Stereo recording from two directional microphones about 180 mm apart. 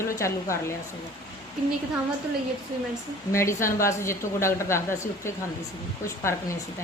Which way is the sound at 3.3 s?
15° left (ahead or behind).